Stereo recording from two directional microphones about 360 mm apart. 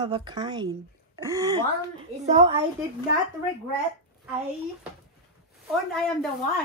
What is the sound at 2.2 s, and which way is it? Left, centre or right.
Speech, centre.